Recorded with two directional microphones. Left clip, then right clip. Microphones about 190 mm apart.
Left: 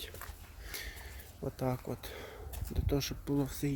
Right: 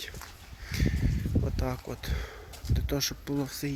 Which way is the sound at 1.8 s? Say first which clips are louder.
Right 4 dB; 10° left (ahead or behind).